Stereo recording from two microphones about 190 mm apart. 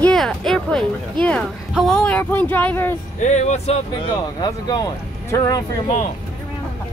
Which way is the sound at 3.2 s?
40° left (ahead or behind).